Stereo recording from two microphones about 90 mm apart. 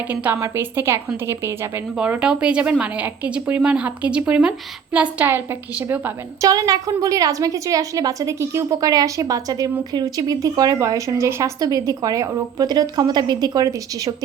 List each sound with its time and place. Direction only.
0.1 s a woman's voice: 20° right (ahead or behind)
0.3 s a woman's voice: 30° right (ahead or behind)
2.0 s a woman's voice: 10° right (ahead or behind)
6.4 s a woman's voice: 40° right (ahead or behind)
11.6 s a woman's voice: 40° right (ahead or behind)